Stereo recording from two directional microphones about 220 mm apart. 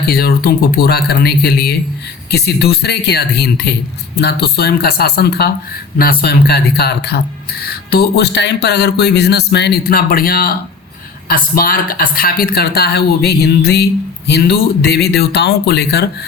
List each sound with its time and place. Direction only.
0.0 s speech: 45° left (ahead or behind)